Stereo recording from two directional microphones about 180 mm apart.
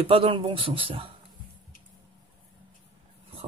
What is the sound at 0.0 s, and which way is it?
Speech, 30° right (ahead or behind).